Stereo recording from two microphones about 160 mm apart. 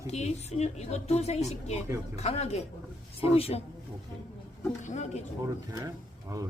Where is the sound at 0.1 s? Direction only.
45° left (ahead or behind).